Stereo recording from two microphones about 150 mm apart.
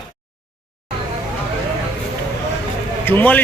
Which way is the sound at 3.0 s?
10° left (ahead or behind).